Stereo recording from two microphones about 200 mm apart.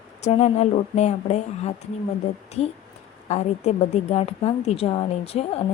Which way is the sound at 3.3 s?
35° left (ahead or behind).